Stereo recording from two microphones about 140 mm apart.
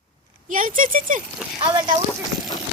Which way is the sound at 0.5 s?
70° right (ahead or behind).